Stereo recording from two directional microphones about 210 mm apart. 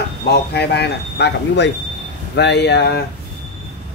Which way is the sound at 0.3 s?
50° left (ahead or behind).